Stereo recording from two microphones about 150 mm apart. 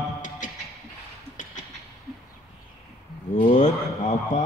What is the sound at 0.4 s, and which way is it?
Music, 60° left (ahead or behind).